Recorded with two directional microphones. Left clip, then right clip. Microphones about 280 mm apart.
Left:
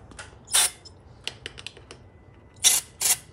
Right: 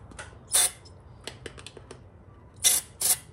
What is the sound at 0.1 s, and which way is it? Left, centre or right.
Mechanisms, centre.